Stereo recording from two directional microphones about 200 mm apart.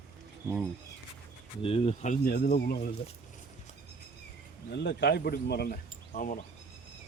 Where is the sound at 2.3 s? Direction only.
50° left (ahead or behind).